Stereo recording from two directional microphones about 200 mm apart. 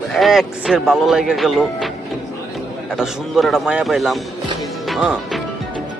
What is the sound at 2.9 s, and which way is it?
A man's voice, centre (ahead or behind).